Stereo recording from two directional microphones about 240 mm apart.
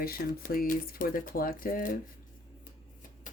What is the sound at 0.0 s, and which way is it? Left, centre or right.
Speech, left.